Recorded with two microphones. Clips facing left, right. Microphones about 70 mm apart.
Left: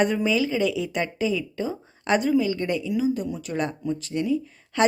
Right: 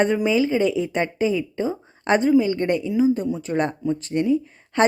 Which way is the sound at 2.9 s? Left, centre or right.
Right.